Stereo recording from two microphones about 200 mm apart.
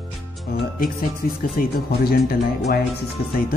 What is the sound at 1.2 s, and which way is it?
Speech, 45° left (ahead or behind).